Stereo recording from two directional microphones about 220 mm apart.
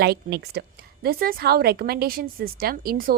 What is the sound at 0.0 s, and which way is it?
A woman's voice, 45° right (ahead or behind).